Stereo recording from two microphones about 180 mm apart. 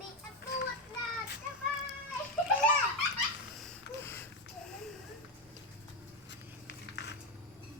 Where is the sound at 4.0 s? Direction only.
15° left (ahead or behind).